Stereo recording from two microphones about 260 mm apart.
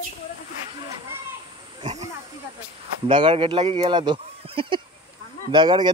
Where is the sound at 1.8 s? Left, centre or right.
Right.